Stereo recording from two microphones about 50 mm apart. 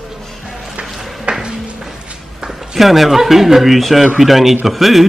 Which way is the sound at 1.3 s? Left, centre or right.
Centre.